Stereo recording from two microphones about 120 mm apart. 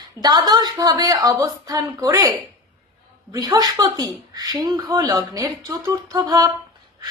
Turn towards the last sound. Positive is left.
turn(degrees=-30)  # may be behind; listen again after turning